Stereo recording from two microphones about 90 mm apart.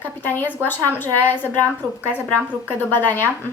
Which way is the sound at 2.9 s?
25° left (ahead or behind).